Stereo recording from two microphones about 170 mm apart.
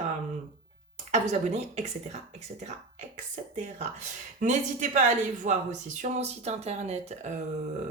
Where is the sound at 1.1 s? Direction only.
40° right (ahead or behind).